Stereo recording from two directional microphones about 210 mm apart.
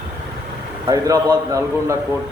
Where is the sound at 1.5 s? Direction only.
15° right (ahead or behind).